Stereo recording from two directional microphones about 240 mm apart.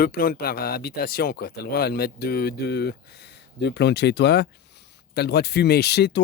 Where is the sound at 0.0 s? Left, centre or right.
Left.